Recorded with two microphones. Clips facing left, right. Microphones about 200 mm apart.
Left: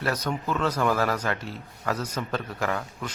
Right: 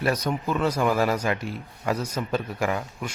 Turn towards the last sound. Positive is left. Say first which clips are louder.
# right 2 dB
turn(degrees=-10)  # may be behind; listen again after turning